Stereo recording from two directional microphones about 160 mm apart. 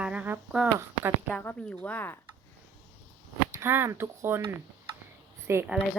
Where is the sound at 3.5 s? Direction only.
15° right (ahead or behind).